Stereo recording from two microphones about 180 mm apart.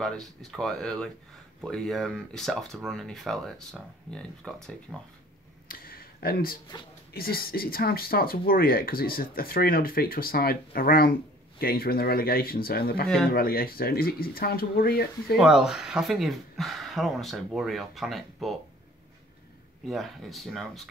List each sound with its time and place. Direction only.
0.4 s speech: centre (ahead or behind)
5.7 s a sound: 55° left (ahead or behind)
7.2 s speech: 55° left (ahead or behind)
15.3 s speech: 5° right (ahead or behind)
19.9 s speech: centre (ahead or behind)